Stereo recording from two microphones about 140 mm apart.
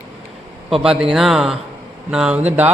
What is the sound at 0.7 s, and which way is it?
A man's voice, 5° right (ahead or behind).